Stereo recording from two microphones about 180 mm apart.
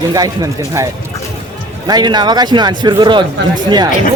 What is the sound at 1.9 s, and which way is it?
Speech, 25° right (ahead or behind).